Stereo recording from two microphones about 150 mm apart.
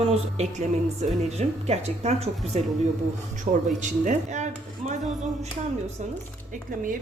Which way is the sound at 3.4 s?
55° right (ahead or behind).